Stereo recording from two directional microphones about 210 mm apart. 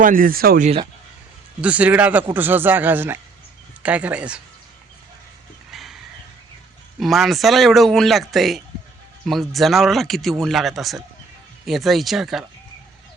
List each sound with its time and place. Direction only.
0.0 s speech: 40° right (ahead or behind)
1.6 s speech: 5° right (ahead or behind)
5.7 s a sound: centre (ahead or behind)
7.0 s speech: centre (ahead or behind)